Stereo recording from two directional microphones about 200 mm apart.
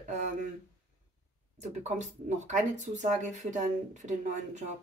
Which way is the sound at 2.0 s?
35° right (ahead or behind).